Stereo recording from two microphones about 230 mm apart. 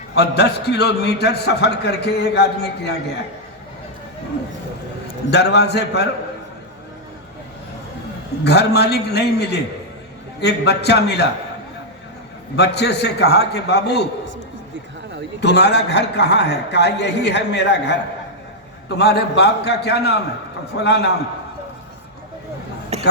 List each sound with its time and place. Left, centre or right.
0.2 s a man's voice: left
5.3 s a man's voice: left
8.4 s a man's voice: left
12.5 s a man's voice: left
15.4 s a man's voice: left
22.9 s a sound: right